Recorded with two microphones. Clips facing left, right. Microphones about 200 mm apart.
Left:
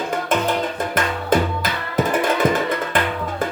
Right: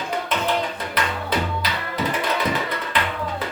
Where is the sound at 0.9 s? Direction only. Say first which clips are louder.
Left 5 dB; 50° left (ahead or behind).